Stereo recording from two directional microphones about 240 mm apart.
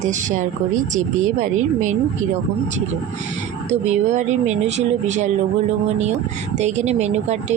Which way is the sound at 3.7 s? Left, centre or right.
Right.